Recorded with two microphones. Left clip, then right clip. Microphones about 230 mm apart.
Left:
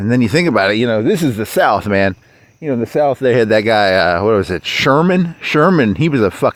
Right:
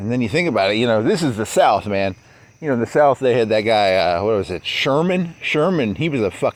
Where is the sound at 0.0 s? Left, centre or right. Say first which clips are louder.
Left 5 dB; left.